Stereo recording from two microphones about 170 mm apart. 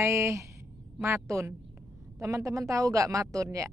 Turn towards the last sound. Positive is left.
turn(degrees=-20)  # may be behind; listen again after turning